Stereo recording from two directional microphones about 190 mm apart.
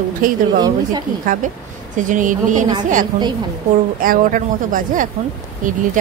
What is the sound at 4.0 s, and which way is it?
Speech, 45° right (ahead or behind).